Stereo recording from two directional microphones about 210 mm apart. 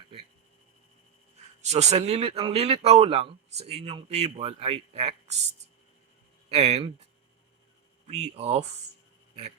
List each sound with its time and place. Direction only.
1.6 s speech: 30° right (ahead or behind)
6.5 s speech: 30° right (ahead or behind)
8.0 s speech: 30° right (ahead or behind)